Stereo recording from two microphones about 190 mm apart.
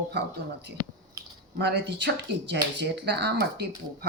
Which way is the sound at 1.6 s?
60° right (ahead or behind).